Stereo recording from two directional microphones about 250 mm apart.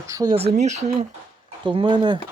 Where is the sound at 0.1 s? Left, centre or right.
Centre.